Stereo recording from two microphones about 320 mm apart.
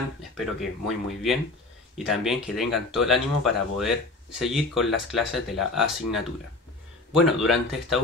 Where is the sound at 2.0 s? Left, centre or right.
Centre.